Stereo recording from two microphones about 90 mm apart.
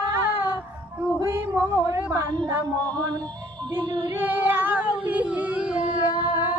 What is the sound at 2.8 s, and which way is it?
Music, 15° left (ahead or behind).